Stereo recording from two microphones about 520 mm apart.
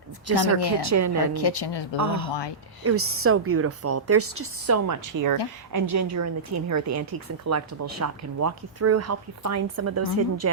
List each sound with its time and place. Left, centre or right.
0.3 s a woman's voice: right
1.3 s speech: left
2.0 s a woman's voice: right